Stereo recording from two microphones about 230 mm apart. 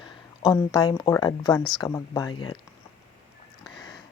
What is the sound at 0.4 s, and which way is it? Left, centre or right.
Speech, centre.